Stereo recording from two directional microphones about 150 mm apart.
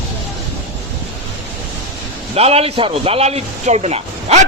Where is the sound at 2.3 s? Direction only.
45° right (ahead or behind).